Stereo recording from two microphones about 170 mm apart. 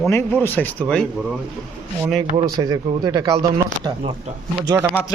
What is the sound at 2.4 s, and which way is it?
Speech, 25° right (ahead or behind).